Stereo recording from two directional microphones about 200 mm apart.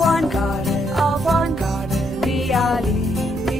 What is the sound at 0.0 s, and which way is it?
Music, centre (ahead or behind).